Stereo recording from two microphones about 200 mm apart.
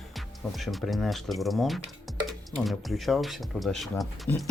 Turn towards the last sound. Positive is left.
turn(degrees=0)  # may be behind; listen again after turning